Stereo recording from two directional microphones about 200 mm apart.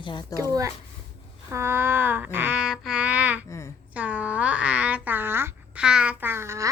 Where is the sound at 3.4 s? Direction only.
15° left (ahead or behind).